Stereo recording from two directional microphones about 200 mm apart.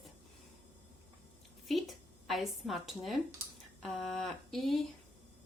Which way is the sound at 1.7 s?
Centre (ahead or behind).